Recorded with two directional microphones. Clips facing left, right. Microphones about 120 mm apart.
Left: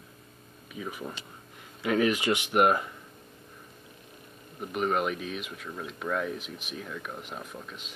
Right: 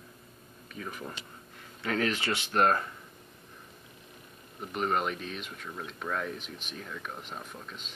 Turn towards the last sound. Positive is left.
turn(degrees=5)  # may be behind; listen again after turning